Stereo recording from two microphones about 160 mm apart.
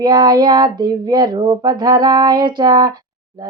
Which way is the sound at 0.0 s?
25° right (ahead or behind).